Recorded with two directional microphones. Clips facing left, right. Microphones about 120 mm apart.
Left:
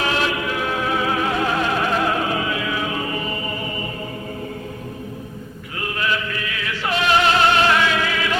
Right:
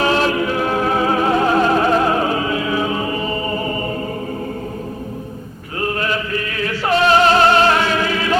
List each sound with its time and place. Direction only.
0.0 s music: 35° right (ahead or behind)
5.8 s music: 40° right (ahead or behind)